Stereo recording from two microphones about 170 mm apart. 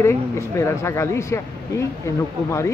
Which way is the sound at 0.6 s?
15° left (ahead or behind).